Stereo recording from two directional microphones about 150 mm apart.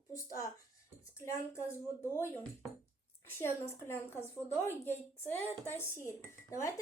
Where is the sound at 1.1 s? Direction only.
20° left (ahead or behind).